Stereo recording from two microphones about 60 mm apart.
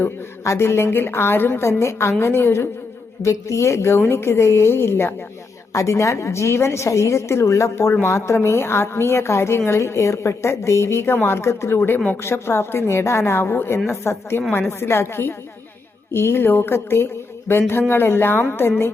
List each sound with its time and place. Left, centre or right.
0.4 s a woman's voice: left
3.2 s a woman's voice: left
5.7 s a woman's voice: left